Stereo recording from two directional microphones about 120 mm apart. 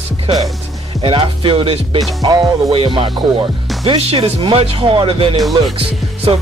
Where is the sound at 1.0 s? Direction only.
45° right (ahead or behind).